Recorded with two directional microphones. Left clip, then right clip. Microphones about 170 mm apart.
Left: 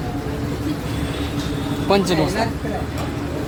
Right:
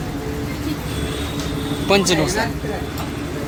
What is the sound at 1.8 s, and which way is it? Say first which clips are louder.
Speech: right 2 dB; 5° left (ahead or behind).